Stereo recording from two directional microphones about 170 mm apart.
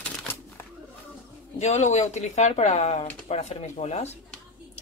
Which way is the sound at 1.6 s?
40° left (ahead or behind).